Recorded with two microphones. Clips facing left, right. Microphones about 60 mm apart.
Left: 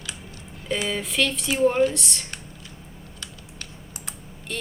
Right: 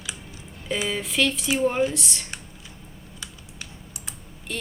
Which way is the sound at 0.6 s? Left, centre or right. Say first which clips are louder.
Even; centre.